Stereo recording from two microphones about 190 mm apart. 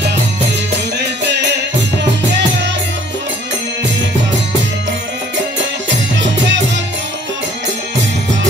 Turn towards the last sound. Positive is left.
turn(degrees=-70)  # may be behind; listen again after turning